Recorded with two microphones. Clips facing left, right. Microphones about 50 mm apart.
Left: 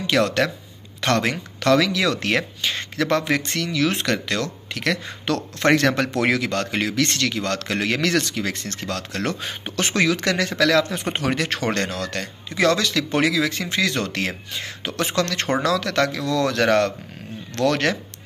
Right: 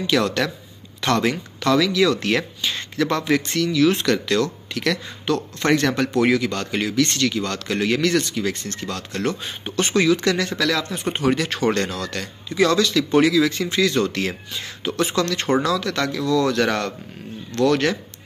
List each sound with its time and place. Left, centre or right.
0.0 s speech: left
5.2 s a man's voice: left
5.9 s speech: left
17.6 s speech: left